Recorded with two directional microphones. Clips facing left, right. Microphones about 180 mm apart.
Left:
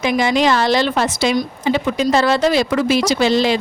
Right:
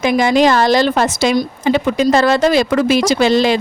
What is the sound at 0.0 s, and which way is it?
A woman's voice, 50° right (ahead or behind).